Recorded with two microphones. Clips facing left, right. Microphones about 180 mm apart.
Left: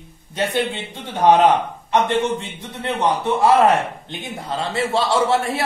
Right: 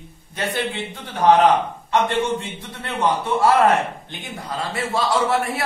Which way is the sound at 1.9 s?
20° left (ahead or behind).